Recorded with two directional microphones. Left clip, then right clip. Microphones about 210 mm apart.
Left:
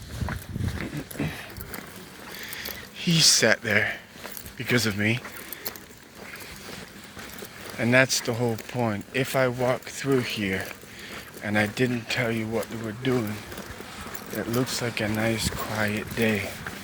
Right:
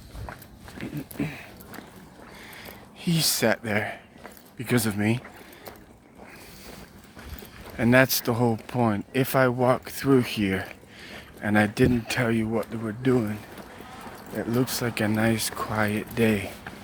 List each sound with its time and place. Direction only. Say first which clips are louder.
2.4 s a sound: left 7 dB; 15° right (ahead or behind)
3.0 s speech: left 5 dB; 15° right (ahead or behind)
7.8 s speech: right 1 dB; 35° right (ahead or behind)
14.3 s speech: right 1 dB; 35° right (ahead or behind)